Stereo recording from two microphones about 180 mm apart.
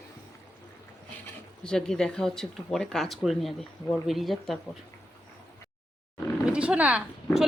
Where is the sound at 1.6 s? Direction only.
5° left (ahead or behind).